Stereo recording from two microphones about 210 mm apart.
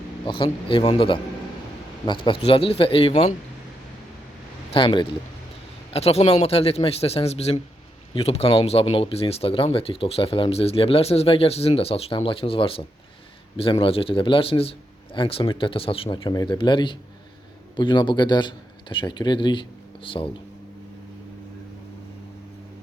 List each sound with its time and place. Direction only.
0.3 s speech: 25° left (ahead or behind)
4.7 s speech: 25° left (ahead or behind)